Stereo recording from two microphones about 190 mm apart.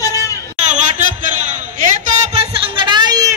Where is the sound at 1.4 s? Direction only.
40° right (ahead or behind).